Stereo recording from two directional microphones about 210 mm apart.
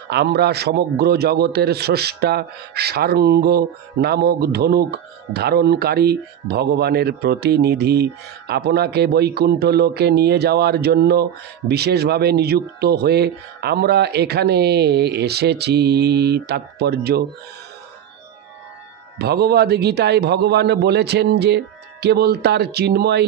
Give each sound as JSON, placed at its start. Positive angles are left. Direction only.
{"t": 0.1, "sound": "a man's voice", "side_deg": -50}
{"t": 19.1, "sound": "a man's voice", "side_deg": -50}